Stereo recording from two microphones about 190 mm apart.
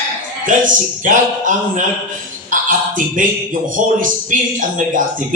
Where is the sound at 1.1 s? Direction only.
45° right (ahead or behind).